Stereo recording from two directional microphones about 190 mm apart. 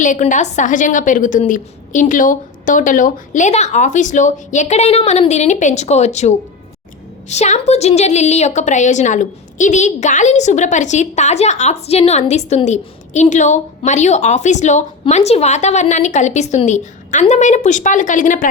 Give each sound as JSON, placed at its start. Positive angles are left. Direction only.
{"t": 0.0, "sound": "a woman's voice", "side_deg": 40}